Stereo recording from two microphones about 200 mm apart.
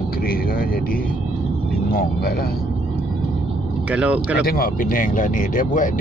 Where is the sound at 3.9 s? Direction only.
5° right (ahead or behind).